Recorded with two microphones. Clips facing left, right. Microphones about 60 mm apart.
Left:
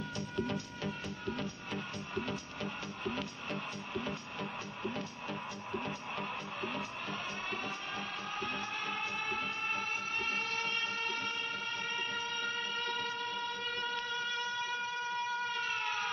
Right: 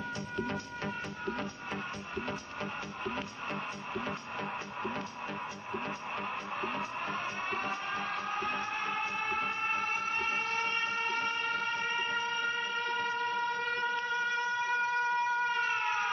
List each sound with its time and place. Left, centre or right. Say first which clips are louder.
0.4 s music: even; right
5.7 s music: right 2 dB; right